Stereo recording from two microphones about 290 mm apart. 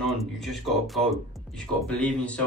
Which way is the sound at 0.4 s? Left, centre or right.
Centre.